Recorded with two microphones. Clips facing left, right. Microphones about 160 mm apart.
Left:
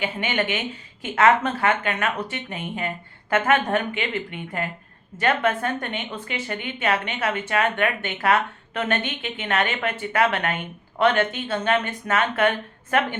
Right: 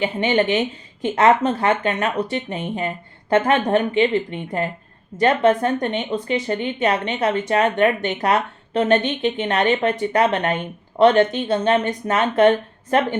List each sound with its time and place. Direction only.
0.0 s speech: 35° right (ahead or behind)